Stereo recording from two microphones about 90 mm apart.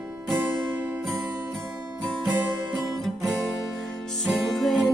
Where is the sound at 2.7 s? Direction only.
Centre (ahead or behind).